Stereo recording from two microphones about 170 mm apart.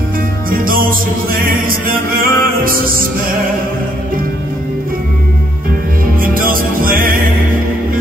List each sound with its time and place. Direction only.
0.5 s music: 55° right (ahead or behind)
6.2 s music: 55° right (ahead or behind)